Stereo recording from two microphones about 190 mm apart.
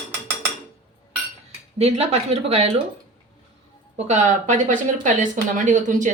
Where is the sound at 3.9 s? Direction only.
35° right (ahead or behind).